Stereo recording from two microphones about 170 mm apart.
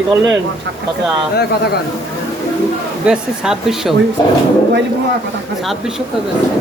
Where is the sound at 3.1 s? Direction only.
5° right (ahead or behind).